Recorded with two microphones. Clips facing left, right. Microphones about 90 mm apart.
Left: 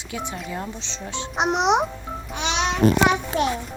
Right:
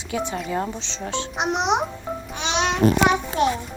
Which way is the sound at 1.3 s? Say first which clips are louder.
Left 3 dB; 20° left (ahead or behind).